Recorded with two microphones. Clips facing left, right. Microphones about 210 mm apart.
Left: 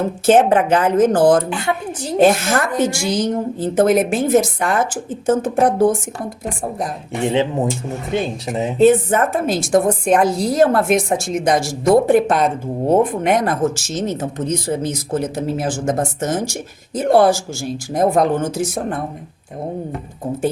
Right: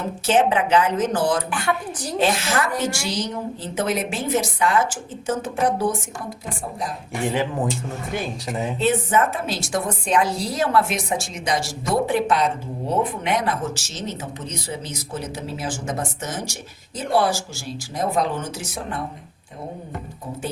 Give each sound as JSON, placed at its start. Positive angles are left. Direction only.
{"t": 0.3, "sound": "speech", "side_deg": 50}
{"t": 1.5, "sound": "a woman's voice", "side_deg": 25}
{"t": 2.1, "sound": "speech", "side_deg": 50}
{"t": 2.7, "sound": "a woman's voice", "side_deg": 20}
{"t": 3.1, "sound": "speech", "side_deg": 50}
{"t": 7.1, "sound": "a woman's voice", "side_deg": 25}
{"t": 8.8, "sound": "speech", "side_deg": 50}